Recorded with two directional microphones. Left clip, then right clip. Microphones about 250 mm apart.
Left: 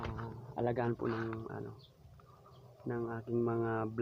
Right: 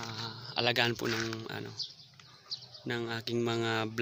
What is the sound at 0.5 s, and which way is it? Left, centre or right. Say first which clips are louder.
Speech: right 6 dB; centre.